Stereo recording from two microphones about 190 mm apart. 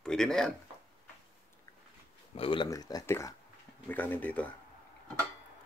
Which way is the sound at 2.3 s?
25° left (ahead or behind).